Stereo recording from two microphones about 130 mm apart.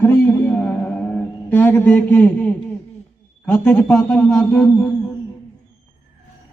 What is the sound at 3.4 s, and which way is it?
A man's voice, 10° left (ahead or behind).